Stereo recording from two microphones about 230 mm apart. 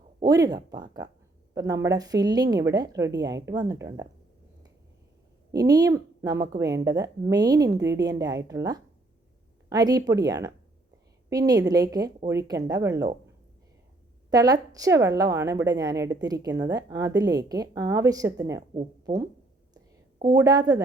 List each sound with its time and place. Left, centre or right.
0.2 s a woman's voice: centre
5.5 s a woman's voice: centre
14.3 s a woman's voice: centre
20.2 s a woman's voice: centre